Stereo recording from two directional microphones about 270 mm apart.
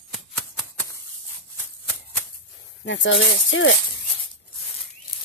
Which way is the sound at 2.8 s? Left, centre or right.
Left.